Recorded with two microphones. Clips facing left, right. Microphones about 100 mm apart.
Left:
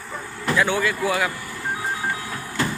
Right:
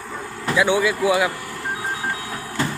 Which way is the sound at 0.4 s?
15° right (ahead or behind).